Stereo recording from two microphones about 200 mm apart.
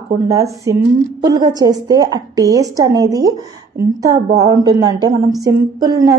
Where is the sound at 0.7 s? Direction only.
15° right (ahead or behind).